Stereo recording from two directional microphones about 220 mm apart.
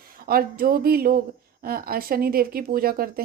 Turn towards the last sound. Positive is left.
turn(degrees=-40)  # may be behind; listen again after turning